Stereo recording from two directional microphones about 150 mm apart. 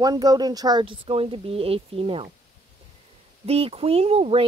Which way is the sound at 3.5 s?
40° right (ahead or behind).